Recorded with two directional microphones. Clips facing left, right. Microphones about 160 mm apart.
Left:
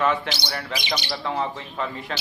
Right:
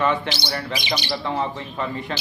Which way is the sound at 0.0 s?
Centre (ahead or behind).